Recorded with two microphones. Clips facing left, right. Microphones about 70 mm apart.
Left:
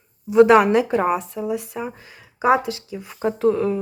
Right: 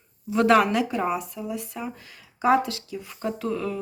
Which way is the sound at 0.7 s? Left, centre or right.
Left.